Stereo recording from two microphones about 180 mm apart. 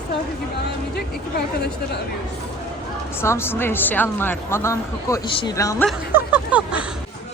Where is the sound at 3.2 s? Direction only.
15° left (ahead or behind).